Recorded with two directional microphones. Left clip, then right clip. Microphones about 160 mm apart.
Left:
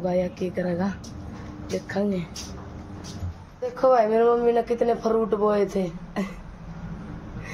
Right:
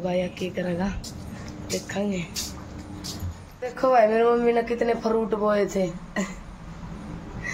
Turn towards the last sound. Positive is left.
turn(degrees=5)  # may be behind; listen again after turning